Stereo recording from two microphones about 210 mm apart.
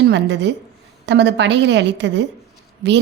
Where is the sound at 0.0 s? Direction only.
55° right (ahead or behind).